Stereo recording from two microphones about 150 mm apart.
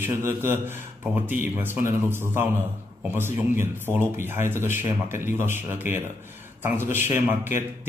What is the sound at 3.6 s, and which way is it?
Speech, 15° right (ahead or behind).